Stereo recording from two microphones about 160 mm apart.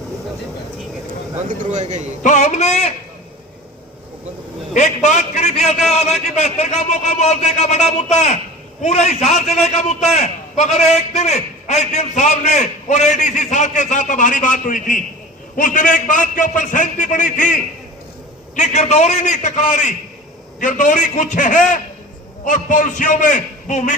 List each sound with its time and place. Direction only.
1.5 s speech: 50° right (ahead or behind)
2.2 s a man's voice: 50° left (ahead or behind)
4.7 s a sound: 50° left (ahead or behind)
5.9 s a man's voice: 45° left (ahead or behind)